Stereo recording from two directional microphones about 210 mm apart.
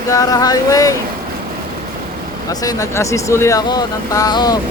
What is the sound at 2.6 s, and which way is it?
Speech, 15° left (ahead or behind).